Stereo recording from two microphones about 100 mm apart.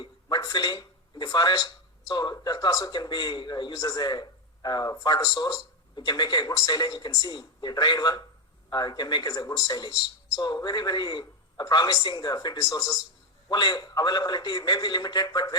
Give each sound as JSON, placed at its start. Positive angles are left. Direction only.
{"t": 0.0, "sound": "speech", "side_deg": 45}
{"t": 13.5, "sound": "speech", "side_deg": 45}